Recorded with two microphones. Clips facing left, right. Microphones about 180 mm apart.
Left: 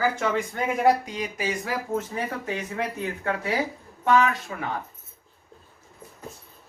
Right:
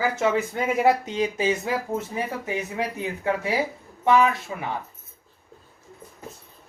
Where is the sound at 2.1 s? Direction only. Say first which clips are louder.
Right 1 dB; 15° right (ahead or behind).